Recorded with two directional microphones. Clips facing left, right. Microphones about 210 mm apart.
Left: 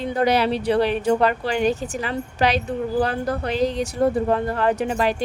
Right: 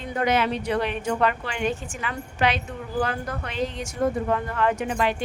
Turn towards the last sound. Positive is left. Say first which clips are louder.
# left 3 dB
turn(degrees=35)  # may be behind; listen again after turning